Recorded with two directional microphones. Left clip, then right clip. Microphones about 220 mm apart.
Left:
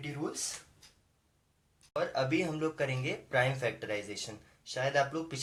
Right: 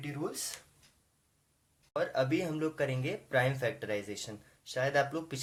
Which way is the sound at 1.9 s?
30° right (ahead or behind).